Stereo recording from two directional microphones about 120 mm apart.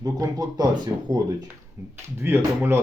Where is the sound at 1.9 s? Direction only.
20° right (ahead or behind).